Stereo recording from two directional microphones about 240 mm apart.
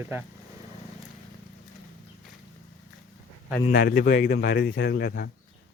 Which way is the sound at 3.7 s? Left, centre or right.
Left.